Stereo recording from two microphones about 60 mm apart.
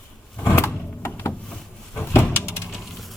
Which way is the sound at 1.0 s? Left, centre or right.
Left.